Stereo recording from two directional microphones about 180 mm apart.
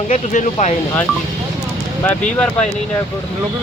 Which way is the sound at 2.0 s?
10° left (ahead or behind).